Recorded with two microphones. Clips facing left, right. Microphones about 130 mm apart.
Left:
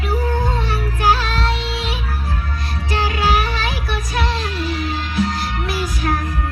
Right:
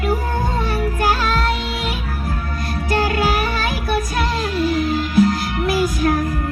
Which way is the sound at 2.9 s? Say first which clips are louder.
Right 1 dB; 50° right (ahead or behind).